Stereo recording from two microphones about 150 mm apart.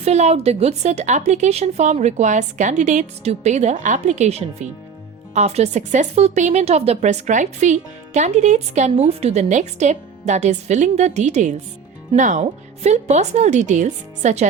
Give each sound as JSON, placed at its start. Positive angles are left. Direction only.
{"t": 0.0, "sound": "speech", "side_deg": -45}